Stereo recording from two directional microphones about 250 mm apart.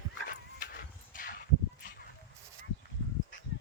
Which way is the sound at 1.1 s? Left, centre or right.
Left.